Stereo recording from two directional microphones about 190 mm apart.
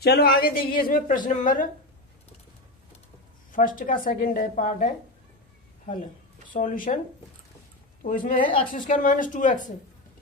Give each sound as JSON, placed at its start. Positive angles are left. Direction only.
{"t": 0.0, "sound": "a woman's voice", "side_deg": 55}
{"t": 3.5, "sound": "speech", "side_deg": 45}
{"t": 6.5, "sound": "speech", "side_deg": 45}
{"t": 8.0, "sound": "speech", "side_deg": 45}